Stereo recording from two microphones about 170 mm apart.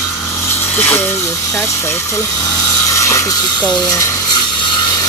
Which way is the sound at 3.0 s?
20° left (ahead or behind).